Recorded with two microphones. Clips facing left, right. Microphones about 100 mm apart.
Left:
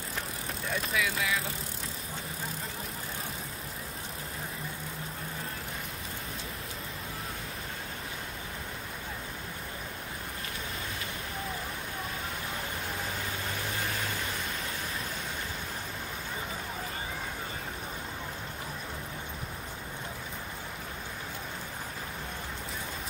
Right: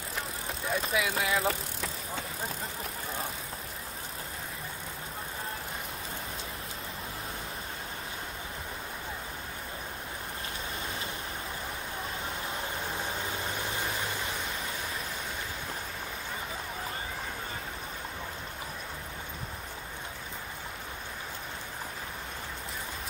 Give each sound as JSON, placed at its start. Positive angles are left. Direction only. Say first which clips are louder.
{"t": 0.8, "sound": "speech", "louder": "right 1 dB", "side_deg": -30}